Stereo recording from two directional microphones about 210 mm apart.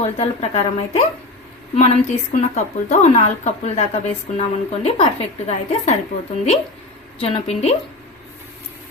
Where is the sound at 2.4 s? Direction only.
35° left (ahead or behind).